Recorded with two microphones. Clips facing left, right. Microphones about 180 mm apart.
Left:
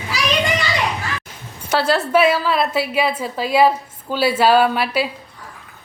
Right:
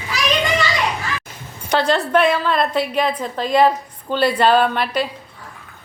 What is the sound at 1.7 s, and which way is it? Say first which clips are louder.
A woman's voice: even; 5° left (ahead or behind).